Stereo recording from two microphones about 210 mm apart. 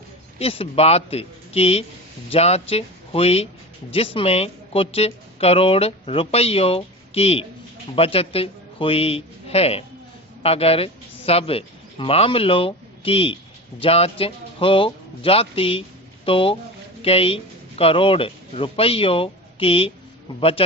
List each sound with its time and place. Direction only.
0.3 s a woman's voice: 30° left (ahead or behind)